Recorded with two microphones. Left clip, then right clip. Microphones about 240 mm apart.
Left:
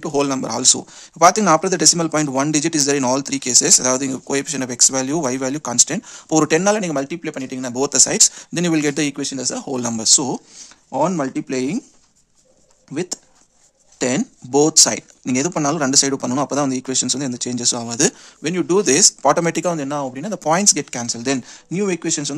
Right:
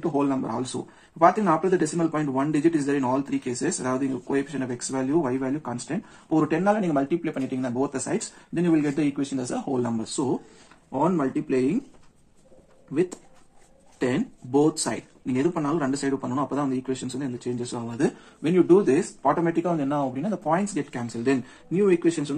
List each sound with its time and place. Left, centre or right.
0.2 s speech: left
7.8 s speech: left
9.8 s speech: left
12.9 s speech: left
18.4 s speech: left
18.9 s speech: left
19.6 s speech: left
20.4 s speech: left